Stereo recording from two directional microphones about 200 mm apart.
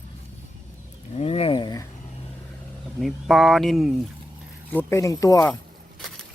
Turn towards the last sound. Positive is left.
turn(degrees=15)  # may be behind; listen again after turning